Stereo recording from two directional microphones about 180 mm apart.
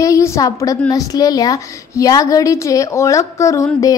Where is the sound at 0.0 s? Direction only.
15° left (ahead or behind).